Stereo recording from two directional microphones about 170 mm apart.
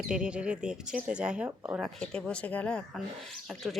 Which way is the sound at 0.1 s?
5° right (ahead or behind).